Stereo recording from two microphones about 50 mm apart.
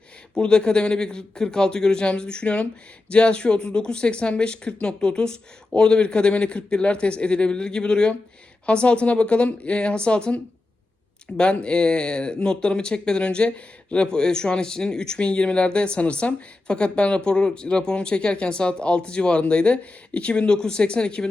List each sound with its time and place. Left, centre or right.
0.3 s speech: centre